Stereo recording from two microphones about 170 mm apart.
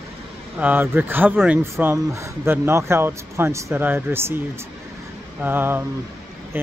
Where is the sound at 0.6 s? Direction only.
10° right (ahead or behind).